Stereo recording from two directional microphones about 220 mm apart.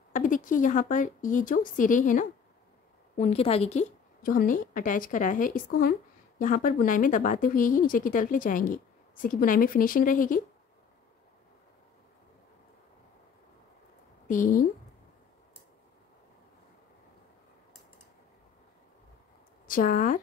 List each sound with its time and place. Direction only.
0.1 s a woman's voice: 35° left (ahead or behind)
14.2 s speech: 35° left (ahead or behind)
19.7 s a woman's voice: 40° left (ahead or behind)